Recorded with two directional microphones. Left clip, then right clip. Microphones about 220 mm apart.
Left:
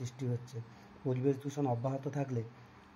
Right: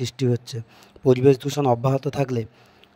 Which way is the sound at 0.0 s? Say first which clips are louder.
Right 17 dB; 45° right (ahead or behind).